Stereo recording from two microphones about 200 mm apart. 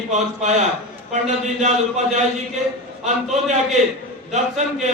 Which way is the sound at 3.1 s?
35° right (ahead or behind).